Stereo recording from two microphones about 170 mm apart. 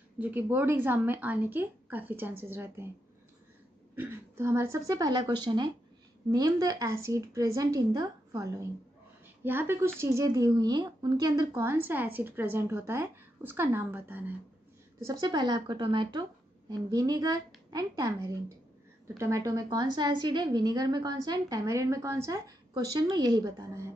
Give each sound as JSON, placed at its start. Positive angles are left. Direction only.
{"t": 0.2, "sound": "a woman's voice", "side_deg": -10}
{"t": 3.9, "sound": "a woman's voice", "side_deg": -15}
{"t": 15.0, "sound": "a woman's voice", "side_deg": -20}